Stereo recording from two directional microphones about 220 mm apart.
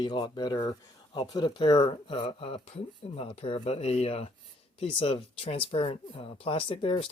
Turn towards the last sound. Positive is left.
turn(degrees=25)  # may be behind; listen again after turning